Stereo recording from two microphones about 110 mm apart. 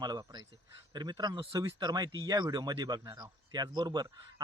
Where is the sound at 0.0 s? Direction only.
40° right (ahead or behind).